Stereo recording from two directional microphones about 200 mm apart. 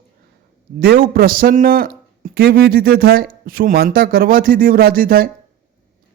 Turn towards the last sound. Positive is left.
turn(degrees=-45)  # may be behind; listen again after turning